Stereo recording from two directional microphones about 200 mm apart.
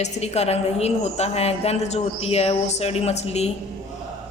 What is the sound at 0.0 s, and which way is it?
A woman's voice, 30° left (ahead or behind).